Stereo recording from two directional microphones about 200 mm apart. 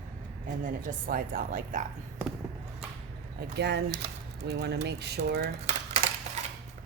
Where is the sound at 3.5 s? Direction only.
55° right (ahead or behind).